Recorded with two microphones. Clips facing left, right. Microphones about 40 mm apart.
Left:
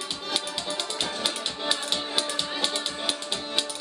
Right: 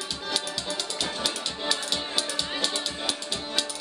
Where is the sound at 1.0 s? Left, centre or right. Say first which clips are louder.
Even; left.